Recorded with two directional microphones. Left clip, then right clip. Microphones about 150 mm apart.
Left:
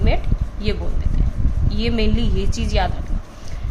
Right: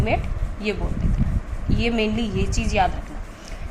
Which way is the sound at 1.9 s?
20° left (ahead or behind).